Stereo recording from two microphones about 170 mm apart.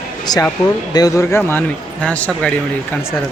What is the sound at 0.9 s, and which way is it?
Speech, 20° left (ahead or behind).